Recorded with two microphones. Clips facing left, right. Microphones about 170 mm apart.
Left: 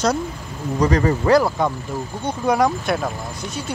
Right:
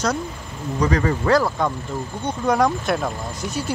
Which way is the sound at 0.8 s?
35° left (ahead or behind).